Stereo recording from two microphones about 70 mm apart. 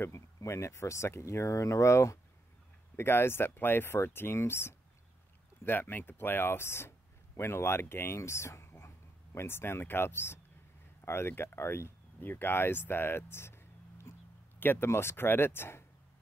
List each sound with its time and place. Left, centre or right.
0.0 s speech: left